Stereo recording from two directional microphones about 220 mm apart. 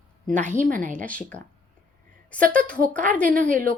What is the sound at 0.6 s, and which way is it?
Speech, 35° right (ahead or behind).